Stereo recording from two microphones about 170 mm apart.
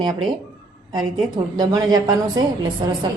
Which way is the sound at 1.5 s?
20° right (ahead or behind).